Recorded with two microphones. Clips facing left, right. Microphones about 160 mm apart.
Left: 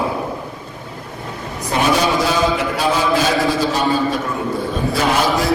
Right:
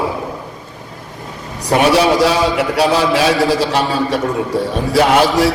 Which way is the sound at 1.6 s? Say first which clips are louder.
Right 5 dB; 75° right (ahead or behind).